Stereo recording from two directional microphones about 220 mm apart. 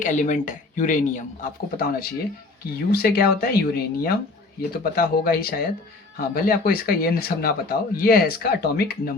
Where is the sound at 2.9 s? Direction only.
45° left (ahead or behind).